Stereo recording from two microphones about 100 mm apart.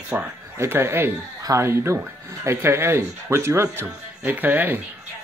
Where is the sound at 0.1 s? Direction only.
20° right (ahead or behind).